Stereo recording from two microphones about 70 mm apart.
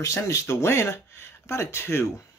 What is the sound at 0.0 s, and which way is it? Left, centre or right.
Speech, left.